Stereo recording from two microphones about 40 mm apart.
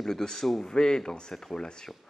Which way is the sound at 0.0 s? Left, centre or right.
Centre.